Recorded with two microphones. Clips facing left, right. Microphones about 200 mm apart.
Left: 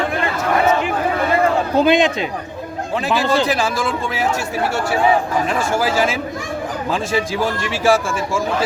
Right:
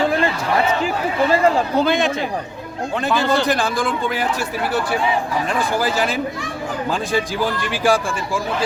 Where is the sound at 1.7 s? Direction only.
15° left (ahead or behind).